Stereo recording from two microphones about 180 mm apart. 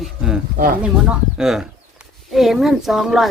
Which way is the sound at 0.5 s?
55° right (ahead or behind).